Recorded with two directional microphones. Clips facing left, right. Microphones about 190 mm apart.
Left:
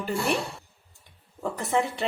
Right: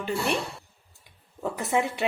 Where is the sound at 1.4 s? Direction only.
5° right (ahead or behind).